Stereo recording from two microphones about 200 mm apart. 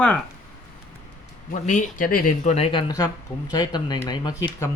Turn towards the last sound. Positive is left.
turn(degrees=15)  # may be behind; listen again after turning